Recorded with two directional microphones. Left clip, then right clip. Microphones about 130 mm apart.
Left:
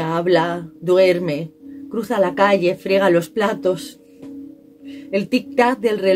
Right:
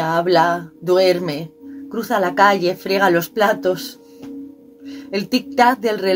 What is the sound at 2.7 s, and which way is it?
Speech, 45° left (ahead or behind).